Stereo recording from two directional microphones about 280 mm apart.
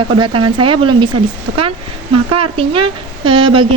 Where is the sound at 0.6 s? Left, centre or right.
Centre.